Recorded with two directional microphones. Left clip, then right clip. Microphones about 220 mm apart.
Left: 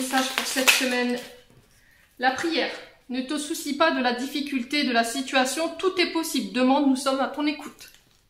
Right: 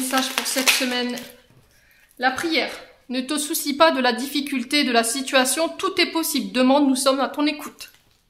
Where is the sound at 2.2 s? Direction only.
45° right (ahead or behind).